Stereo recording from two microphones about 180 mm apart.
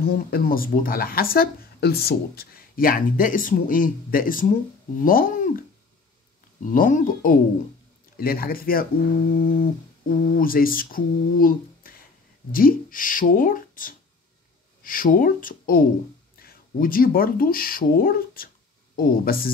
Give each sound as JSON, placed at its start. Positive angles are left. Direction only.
{"t": 0.0, "sound": "speech", "side_deg": 55}